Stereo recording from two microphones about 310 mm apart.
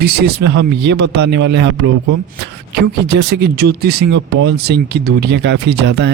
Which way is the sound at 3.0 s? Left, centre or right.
Right.